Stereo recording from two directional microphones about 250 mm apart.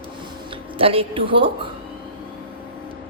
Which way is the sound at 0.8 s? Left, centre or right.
Right.